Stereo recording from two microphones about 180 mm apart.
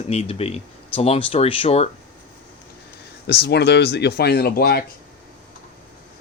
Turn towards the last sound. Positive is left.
turn(degrees=60)  # may be behind; listen again after turning